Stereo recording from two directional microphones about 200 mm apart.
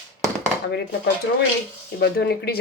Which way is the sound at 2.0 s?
55° left (ahead or behind).